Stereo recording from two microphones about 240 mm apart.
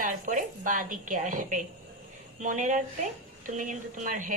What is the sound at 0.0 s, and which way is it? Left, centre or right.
A woman's voice, right.